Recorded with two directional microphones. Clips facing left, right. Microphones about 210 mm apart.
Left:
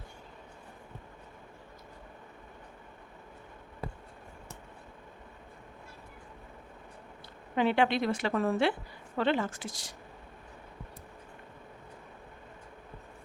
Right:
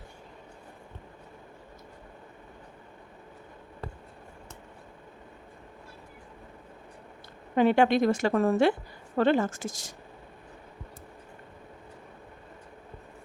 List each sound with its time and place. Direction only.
7.5 s a woman's voice: 45° right (ahead or behind)